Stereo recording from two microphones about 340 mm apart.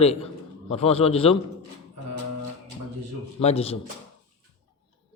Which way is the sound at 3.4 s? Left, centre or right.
Centre.